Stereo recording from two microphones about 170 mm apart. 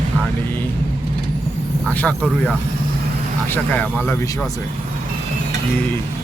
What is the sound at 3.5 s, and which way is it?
Speech, 10° left (ahead or behind).